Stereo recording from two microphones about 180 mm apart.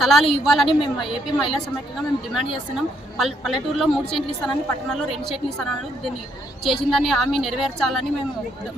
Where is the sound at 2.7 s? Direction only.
Centre (ahead or behind).